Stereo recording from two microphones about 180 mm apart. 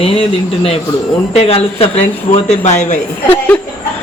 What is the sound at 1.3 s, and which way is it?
Speech, 35° left (ahead or behind).